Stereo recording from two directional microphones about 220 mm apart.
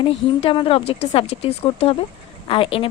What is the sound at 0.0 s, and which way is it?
A woman's voice, 25° left (ahead or behind).